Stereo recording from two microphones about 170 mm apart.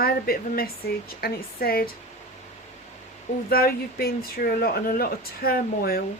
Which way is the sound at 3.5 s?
60° left (ahead or behind).